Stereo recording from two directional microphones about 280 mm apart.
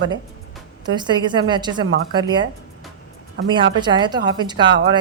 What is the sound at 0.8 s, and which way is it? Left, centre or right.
A woman's voice, centre.